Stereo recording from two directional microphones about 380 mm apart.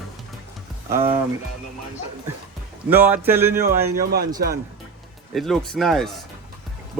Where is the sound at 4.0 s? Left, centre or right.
Right.